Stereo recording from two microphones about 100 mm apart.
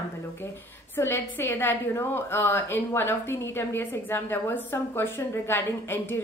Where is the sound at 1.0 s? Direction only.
20° left (ahead or behind).